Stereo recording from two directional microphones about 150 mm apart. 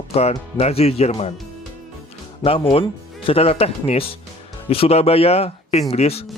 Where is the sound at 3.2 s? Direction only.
40° left (ahead or behind).